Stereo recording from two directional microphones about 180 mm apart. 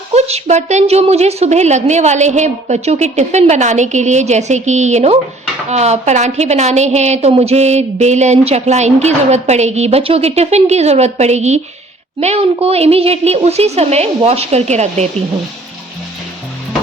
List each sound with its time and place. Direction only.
0.1 s a woman's voice: 35° right (ahead or behind)